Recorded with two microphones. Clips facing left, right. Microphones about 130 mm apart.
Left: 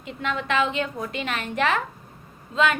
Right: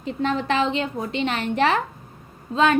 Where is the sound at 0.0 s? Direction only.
35° right (ahead or behind).